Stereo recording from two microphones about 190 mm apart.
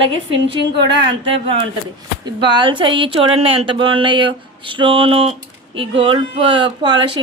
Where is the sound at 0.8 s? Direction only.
25° right (ahead or behind).